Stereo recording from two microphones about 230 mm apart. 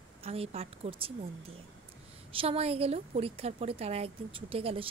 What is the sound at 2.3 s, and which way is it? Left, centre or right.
A woman's voice, right.